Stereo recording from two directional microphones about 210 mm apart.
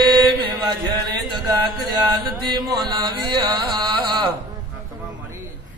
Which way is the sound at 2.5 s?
20° right (ahead or behind).